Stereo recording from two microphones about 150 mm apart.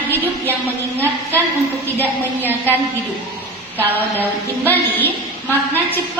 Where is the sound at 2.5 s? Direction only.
15° right (ahead or behind).